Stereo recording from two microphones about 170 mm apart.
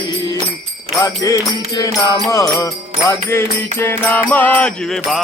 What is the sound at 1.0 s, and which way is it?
Music, 20° left (ahead or behind).